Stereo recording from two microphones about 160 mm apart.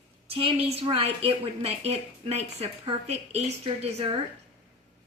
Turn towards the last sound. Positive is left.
turn(degrees=-35)  # may be behind; listen again after turning